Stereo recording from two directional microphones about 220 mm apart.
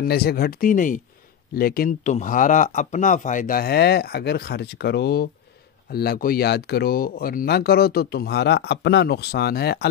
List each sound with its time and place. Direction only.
0.0 s speech: 45° left (ahead or behind)